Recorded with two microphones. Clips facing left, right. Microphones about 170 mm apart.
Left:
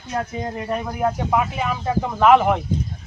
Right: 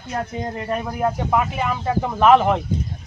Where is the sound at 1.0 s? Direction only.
Centre (ahead or behind).